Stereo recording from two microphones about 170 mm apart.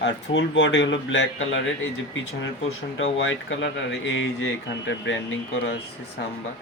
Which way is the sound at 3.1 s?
90° left.